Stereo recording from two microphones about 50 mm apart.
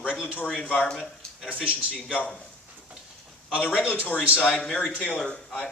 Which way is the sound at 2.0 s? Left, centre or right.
Left.